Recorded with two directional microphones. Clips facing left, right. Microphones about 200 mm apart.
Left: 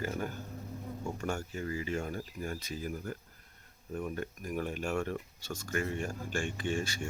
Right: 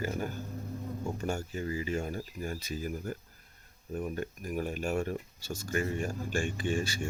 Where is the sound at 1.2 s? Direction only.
30° right (ahead or behind).